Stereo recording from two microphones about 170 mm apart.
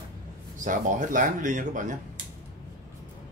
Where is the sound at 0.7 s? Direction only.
50° right (ahead or behind).